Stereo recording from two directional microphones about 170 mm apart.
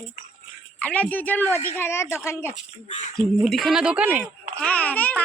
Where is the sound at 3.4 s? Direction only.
Centre (ahead or behind).